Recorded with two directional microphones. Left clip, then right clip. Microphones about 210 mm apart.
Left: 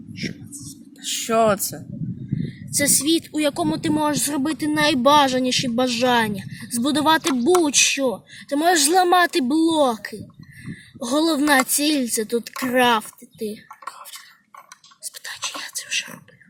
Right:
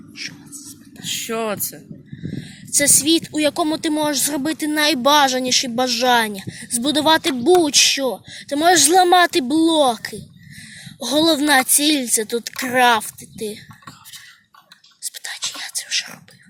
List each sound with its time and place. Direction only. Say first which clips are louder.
0.2 s a sound: right 1 dB; 10° left (ahead or behind)
1.0 s speech: left 5 dB; 45° left (ahead or behind)
2.4 s speech: right 3 dB; centre (ahead or behind)
15.0 s whispering: right 3 dB; centre (ahead or behind)